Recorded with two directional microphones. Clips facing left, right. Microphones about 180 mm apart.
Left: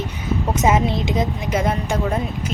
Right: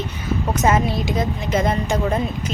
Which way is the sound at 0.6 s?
20° left (ahead or behind).